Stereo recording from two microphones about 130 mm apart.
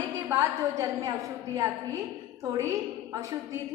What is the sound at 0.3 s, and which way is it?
A woman's voice, 25° right (ahead or behind).